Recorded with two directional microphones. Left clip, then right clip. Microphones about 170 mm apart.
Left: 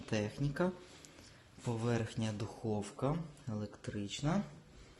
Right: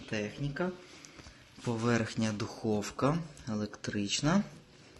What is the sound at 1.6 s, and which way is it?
Speech, centre (ahead or behind).